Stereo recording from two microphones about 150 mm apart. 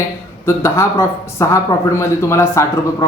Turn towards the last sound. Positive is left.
turn(degrees=20)  # may be behind; listen again after turning